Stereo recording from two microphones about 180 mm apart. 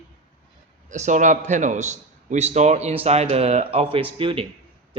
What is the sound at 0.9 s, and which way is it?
A man's voice, 40° right (ahead or behind).